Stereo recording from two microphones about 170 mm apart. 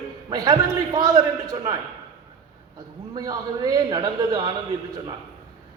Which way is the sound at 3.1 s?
20° right (ahead or behind).